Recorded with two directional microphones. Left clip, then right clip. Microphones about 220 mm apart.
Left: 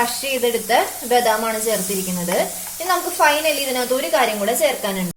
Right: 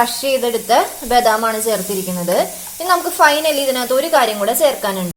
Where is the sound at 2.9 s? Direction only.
30° right (ahead or behind).